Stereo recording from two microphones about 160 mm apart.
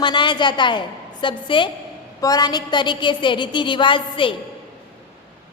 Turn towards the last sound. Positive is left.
turn(degrees=30)  # may be behind; listen again after turning